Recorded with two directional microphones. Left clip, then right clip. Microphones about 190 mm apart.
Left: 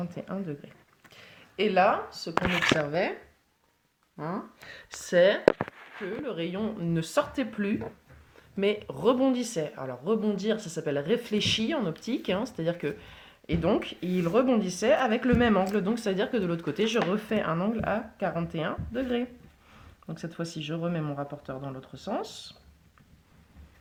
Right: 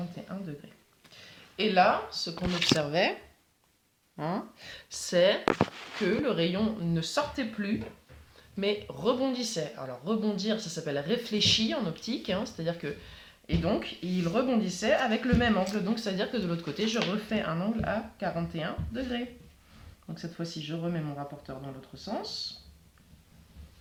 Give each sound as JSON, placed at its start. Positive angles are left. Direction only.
{"t": 0.2, "sound": "speech", "side_deg": 40}
{"t": 2.9, "sound": "speech", "side_deg": 5}
{"t": 4.2, "sound": "speech", "side_deg": 0}
{"t": 5.0, "sound": "speech", "side_deg": 35}